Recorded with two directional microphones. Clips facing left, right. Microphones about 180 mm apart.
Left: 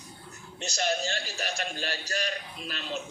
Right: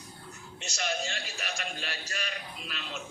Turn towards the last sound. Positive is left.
turn(degrees=40)  # may be behind; listen again after turning